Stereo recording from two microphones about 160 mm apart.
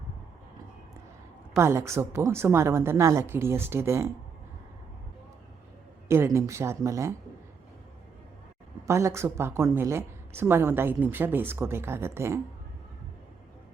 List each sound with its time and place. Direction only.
1.5 s a woman's voice: 15° right (ahead or behind)
6.1 s a woman's voice: 15° right (ahead or behind)
8.9 s a woman's voice: 20° right (ahead or behind)